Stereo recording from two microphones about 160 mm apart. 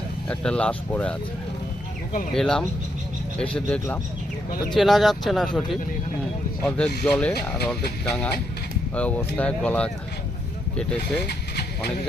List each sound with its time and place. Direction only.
0.3 s speech: 5° left (ahead or behind)
2.3 s speech: 5° left (ahead or behind)
9.0 s speech: 10° left (ahead or behind)
11.3 s vehicle: 85° left